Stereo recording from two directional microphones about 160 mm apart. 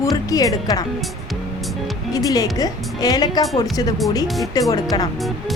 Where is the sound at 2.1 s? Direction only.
20° left (ahead or behind).